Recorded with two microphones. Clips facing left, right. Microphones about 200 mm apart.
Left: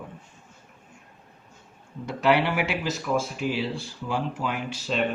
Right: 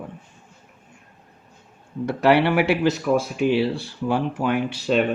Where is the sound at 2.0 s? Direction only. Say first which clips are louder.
Right 5 dB; 60° right (ahead or behind).